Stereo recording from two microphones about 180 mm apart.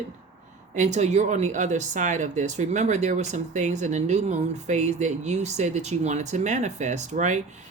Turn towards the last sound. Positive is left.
turn(degrees=-40)  # may be behind; listen again after turning